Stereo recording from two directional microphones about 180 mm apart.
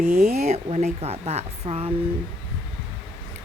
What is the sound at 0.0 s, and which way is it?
Speech, 40° right (ahead or behind).